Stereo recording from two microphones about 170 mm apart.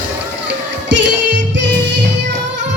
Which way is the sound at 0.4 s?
90° right.